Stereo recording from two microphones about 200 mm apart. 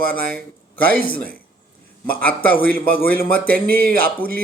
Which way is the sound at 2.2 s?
10° left (ahead or behind).